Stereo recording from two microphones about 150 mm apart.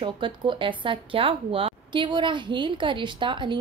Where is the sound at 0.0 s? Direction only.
35° right (ahead or behind).